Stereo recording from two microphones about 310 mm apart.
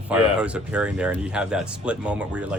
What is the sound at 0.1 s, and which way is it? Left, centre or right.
Speech, centre.